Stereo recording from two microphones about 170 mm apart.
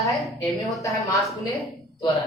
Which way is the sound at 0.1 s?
Centre (ahead or behind).